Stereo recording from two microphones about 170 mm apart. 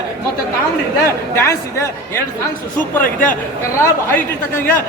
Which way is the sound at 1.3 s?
15° left (ahead or behind).